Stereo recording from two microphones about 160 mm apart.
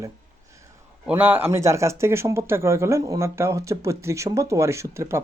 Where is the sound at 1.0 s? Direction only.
10° right (ahead or behind).